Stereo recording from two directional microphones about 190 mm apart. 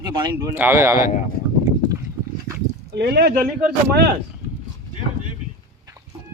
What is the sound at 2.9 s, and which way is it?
Speech, 60° right (ahead or behind).